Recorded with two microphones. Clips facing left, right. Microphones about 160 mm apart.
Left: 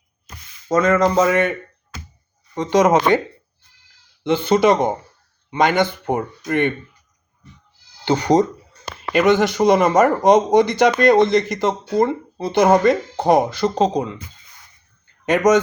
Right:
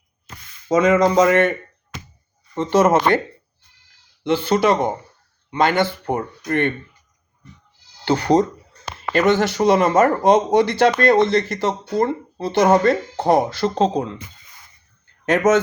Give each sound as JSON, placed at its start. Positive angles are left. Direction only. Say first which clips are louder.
{"t": 0.7, "sound": "speech", "louder": "right 1 dB", "side_deg": -10}
{"t": 0.9, "sound": "speech", "louder": "right 1 dB", "side_deg": 10}
{"t": 2.6, "sound": "speech", "louder": "left 1 dB", "side_deg": 15}
{"t": 4.4, "sound": "speech", "louder": "left 3 dB", "side_deg": 20}
{"t": 8.0, "sound": "speech", "louder": "left 1 dB", "side_deg": 20}